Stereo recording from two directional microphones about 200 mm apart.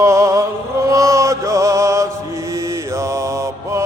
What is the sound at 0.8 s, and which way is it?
Mantra, 15° right (ahead or behind).